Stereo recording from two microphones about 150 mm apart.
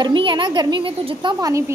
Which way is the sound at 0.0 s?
35° right (ahead or behind).